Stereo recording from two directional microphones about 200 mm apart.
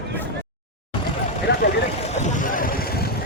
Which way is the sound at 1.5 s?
55° left (ahead or behind).